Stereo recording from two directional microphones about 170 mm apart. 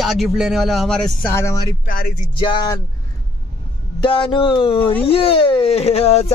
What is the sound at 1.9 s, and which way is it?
Speech, 60° left (ahead or behind).